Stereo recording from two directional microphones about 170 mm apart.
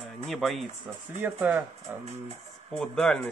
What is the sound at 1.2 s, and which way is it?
Speech, 10° right (ahead or behind).